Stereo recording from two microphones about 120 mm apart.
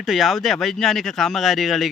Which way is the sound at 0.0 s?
Centre (ahead or behind).